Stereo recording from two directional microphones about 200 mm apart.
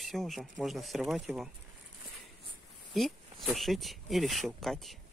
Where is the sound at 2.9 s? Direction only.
Centre (ahead or behind).